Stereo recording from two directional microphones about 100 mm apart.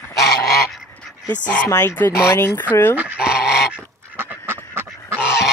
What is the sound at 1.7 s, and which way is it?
Speech, 25° left (ahead or behind).